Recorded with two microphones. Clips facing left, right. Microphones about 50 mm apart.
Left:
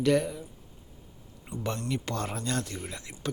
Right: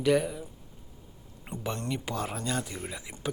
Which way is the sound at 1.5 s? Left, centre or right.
Right.